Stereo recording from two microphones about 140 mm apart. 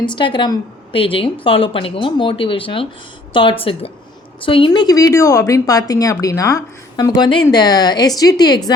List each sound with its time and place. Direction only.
0.0 s a woman's voice: 35° left (ahead or behind)